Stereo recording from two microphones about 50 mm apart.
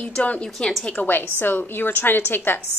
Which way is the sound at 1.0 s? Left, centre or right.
Left.